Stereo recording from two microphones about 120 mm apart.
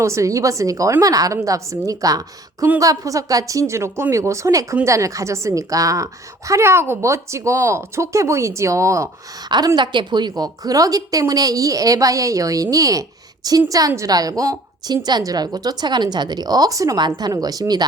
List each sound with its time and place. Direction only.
0.0 s speech: 25° right (ahead or behind)
9.5 s a woman's voice: 35° right (ahead or behind)